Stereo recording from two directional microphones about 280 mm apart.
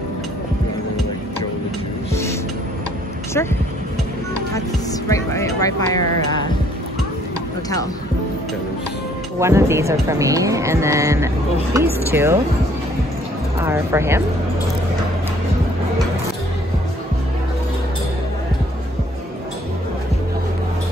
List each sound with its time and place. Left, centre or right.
5.1 s speech: centre
9.4 s speech: centre
13.6 s speech: centre